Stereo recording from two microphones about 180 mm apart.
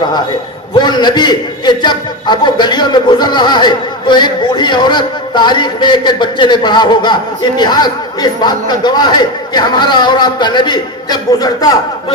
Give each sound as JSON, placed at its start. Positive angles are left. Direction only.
{"t": 0.7, "sound": "a man's voice", "side_deg": 25}